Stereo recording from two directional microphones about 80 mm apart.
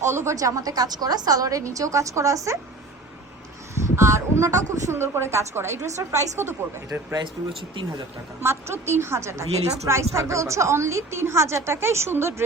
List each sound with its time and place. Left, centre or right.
0.1 s a woman's voice: right
0.3 s a woman's voice: right
3.8 s a woman's voice: right
7.1 s speech: right
8.4 s a woman's voice: right